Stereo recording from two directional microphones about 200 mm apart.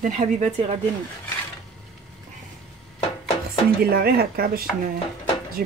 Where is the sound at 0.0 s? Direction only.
35° right (ahead or behind).